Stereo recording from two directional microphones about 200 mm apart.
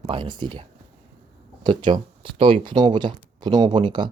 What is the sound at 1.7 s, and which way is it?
Speech, 25° right (ahead or behind).